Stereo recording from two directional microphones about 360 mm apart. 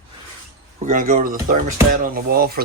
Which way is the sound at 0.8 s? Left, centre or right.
Centre.